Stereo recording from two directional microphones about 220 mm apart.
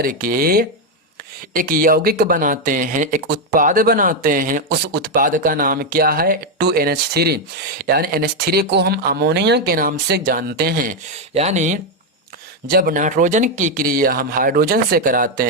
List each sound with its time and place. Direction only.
0.0 s speech: 40° right (ahead or behind)
11.3 s speech: 30° right (ahead or behind)
12.6 s speech: 45° right (ahead or behind)